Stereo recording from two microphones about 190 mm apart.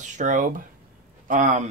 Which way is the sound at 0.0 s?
40° right (ahead or behind).